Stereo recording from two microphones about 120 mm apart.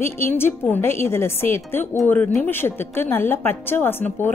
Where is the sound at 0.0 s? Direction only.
20° left (ahead or behind).